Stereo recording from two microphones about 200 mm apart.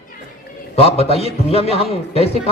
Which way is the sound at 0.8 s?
30° left (ahead or behind).